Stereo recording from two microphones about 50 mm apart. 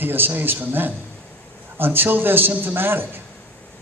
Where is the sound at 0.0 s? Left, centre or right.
Right.